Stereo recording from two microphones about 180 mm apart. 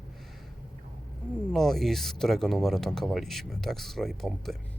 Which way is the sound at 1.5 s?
Centre (ahead or behind).